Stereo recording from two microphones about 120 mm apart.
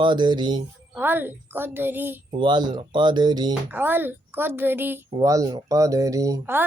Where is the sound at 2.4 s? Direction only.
40° right (ahead or behind).